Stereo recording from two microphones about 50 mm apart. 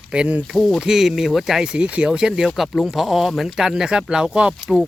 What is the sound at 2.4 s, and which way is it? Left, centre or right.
Speech, centre.